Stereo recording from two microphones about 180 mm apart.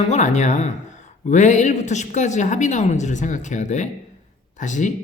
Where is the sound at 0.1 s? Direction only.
40° left (ahead or behind).